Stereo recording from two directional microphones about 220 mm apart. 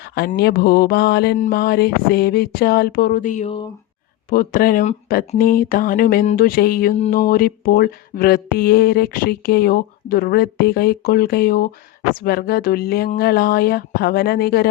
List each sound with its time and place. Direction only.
0.0 s speech: 45° left (ahead or behind)